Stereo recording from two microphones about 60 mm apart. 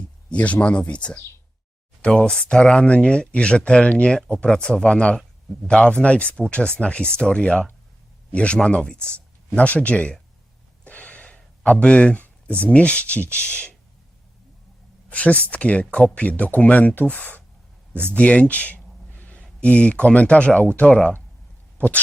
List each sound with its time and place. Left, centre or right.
0.3 s speech: left
10.8 s gasp: left
11.6 s speech: left
15.1 s speech: left